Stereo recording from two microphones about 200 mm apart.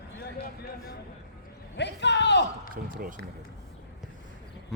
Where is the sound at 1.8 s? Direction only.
60° left (ahead or behind).